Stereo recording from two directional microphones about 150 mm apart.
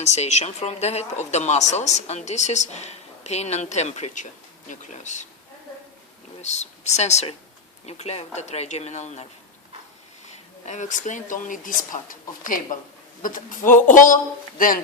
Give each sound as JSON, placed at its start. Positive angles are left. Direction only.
{"t": 0.0, "sound": "speech", "side_deg": 50}
{"t": 6.4, "sound": "speech", "side_deg": 50}
{"t": 10.7, "sound": "speech", "side_deg": 55}